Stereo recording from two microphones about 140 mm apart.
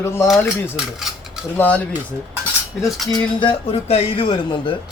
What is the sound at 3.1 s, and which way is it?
Speech, 35° left (ahead or behind).